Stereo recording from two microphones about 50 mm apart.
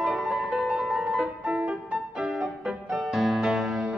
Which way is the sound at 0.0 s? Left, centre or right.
Centre.